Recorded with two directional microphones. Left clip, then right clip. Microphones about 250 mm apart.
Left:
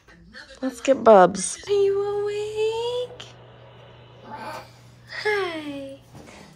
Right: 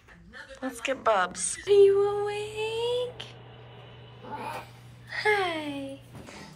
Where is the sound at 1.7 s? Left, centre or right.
Centre.